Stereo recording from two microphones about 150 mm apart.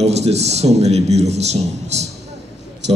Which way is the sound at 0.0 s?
45° right (ahead or behind).